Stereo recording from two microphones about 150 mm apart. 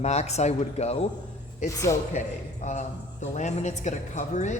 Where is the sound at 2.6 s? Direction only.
50° left (ahead or behind).